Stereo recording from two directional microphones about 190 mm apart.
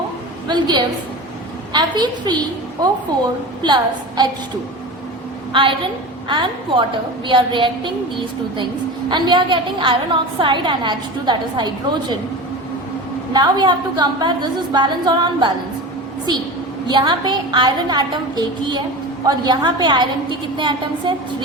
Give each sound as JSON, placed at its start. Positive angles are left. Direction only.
{"t": 0.4, "sound": "a woman's voice", "side_deg": -25}
{"t": 3.6, "sound": "a woman's voice", "side_deg": -25}
{"t": 5.5, "sound": "a woman's voice", "side_deg": -25}
{"t": 13.3, "sound": "a woman's voice", "side_deg": -20}
{"t": 16.8, "sound": "a woman's voice", "side_deg": -25}